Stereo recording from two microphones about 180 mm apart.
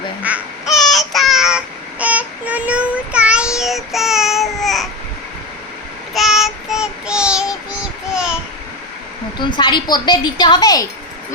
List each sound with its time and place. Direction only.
0.2 s child singing: 5° right (ahead or behind)
6.1 s child singing: centre (ahead or behind)
8.1 s a sound: 5° right (ahead or behind)
9.4 s a woman's voice: 25° left (ahead or behind)